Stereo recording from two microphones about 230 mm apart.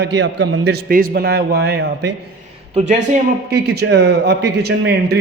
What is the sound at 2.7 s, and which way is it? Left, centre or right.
Speech, right.